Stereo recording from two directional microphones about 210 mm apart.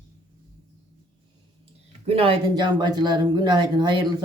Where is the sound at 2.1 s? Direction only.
25° right (ahead or behind).